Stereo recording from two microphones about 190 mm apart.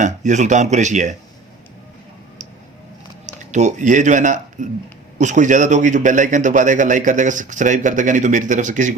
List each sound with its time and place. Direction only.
0.0 s a man's voice: 40° right (ahead or behind)
3.2 s a man's voice: 40° right (ahead or behind)